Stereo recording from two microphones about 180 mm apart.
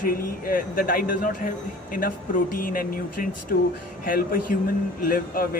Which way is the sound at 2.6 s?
50° left (ahead or behind).